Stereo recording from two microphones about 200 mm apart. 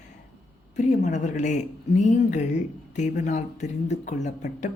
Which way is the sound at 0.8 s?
35° left (ahead or behind).